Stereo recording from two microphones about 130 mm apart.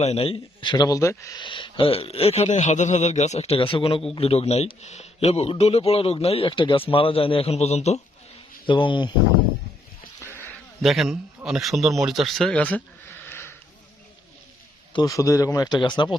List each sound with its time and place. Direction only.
0.0 s a man's voice: 50° left (ahead or behind); by 1.4 s 25° left (ahead or behind)
1.4 s speech: 40° left (ahead or behind); by 8.0 s 55° left (ahead or behind)
8.6 s a man's voice: 40° left (ahead or behind)
10.2 s a sound: 15° left (ahead or behind)
10.8 s a man's voice: centre (ahead or behind); by 13.5 s 15° left (ahead or behind)
15.0 s speech: 25° left (ahead or behind)